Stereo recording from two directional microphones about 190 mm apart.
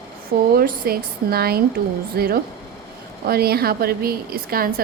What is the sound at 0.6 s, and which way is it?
A woman's voice, 50° right (ahead or behind).